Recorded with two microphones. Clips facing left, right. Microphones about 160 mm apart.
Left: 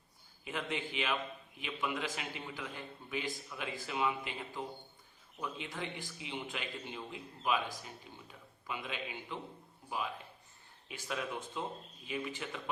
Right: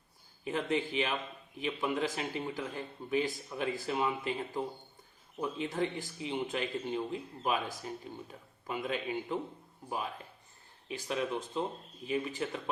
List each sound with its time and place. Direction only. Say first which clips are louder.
0.4 s speech: right 7 dB; 35° right (ahead or behind)
10.8 s speech: right 5 dB; 25° right (ahead or behind)
12.0 s speech: right 6 dB; 35° right (ahead or behind)